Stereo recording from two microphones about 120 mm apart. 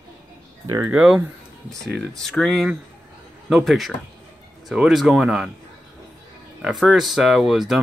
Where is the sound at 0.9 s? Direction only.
15° right (ahead or behind).